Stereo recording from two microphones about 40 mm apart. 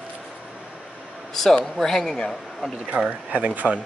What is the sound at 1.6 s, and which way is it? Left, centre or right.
Speech, centre.